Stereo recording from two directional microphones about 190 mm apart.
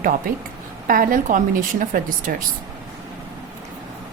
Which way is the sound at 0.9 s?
45° right (ahead or behind).